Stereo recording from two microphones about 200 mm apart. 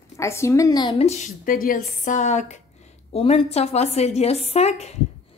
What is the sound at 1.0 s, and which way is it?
A woman's voice, 35° left (ahead or behind).